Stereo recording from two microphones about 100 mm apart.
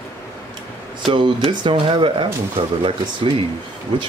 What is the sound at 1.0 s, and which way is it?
Speech, 55° right (ahead or behind).